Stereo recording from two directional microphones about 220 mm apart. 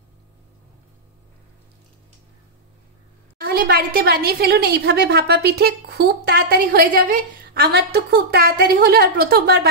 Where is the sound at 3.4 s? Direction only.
45° right (ahead or behind).